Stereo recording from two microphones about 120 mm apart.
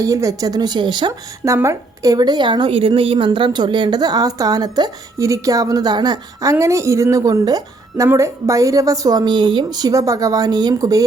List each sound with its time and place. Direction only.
0.0 s a woman's voice: 25° right (ahead or behind)
1.5 s a woman's voice: 25° right (ahead or behind)